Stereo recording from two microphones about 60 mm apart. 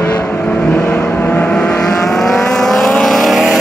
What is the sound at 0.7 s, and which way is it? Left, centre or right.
Vehicle, left.